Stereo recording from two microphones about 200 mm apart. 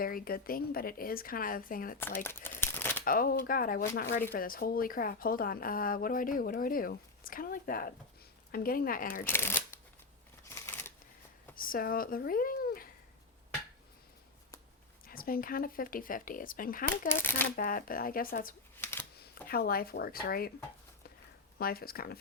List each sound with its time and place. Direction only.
0.0 s speech: 45° left (ahead or behind)
2.0 s speech: 10° left (ahead or behind)
3.0 s speech: 45° left (ahead or behind)
9.2 s speech: 10° left (ahead or behind)
10.5 s a sound: 15° left (ahead or behind)
11.5 s speech: 45° left (ahead or behind)
15.0 s speech: 45° left (ahead or behind)
17.1 s speech: 10° left (ahead or behind)
17.6 s speech: 45° left (ahead or behind)
18.8 s typewriter: 10° left (ahead or behind)
19.2 s speech: 50° left (ahead or behind)
21.6 s speech: 50° left (ahead or behind)